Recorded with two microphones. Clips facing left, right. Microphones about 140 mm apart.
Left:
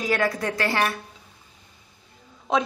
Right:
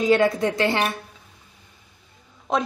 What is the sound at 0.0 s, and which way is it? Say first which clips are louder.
Speech: right 6 dB; 25° right (ahead or behind).